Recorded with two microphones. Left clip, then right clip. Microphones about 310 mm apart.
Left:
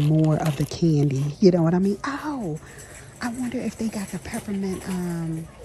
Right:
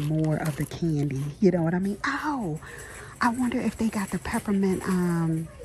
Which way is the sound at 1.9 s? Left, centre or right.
Centre.